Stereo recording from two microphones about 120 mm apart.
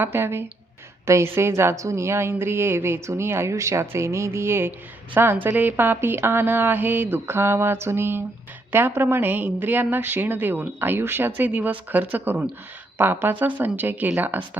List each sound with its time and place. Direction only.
0.0 s a woman's voice: 20° right (ahead or behind)